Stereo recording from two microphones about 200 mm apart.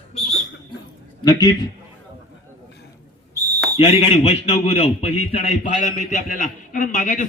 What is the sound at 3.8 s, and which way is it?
A man's voice, 30° left (ahead or behind).